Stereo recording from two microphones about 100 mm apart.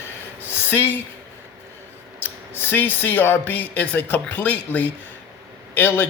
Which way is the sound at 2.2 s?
20° left (ahead or behind).